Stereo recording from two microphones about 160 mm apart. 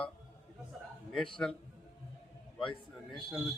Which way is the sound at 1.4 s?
5° left (ahead or behind).